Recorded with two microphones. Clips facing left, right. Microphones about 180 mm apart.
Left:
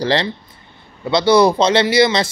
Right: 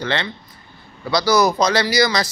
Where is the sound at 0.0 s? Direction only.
35° left (ahead or behind).